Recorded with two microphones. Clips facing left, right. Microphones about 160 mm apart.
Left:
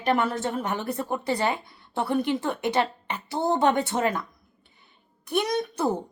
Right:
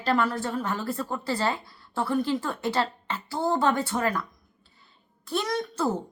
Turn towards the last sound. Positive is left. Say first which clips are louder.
# left 2 dB
turn(degrees=15)  # may be behind; listen again after turning